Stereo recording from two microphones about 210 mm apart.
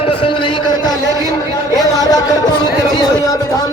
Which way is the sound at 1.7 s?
15° left (ahead or behind).